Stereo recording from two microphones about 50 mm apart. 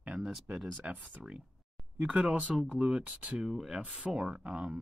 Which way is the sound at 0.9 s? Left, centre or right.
Right.